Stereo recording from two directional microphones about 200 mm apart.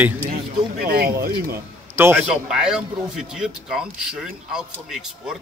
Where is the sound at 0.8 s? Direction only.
50° right (ahead or behind).